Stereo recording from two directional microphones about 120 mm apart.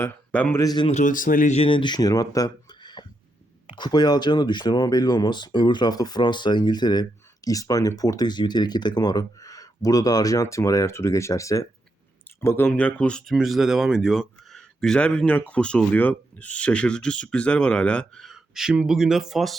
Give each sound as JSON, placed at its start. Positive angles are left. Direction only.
{"t": 0.3, "sound": "speech", "side_deg": 10}
{"t": 0.5, "sound": "speech", "side_deg": 30}
{"t": 0.9, "sound": "speech", "side_deg": 85}
{"t": 1.6, "sound": "speech", "side_deg": 40}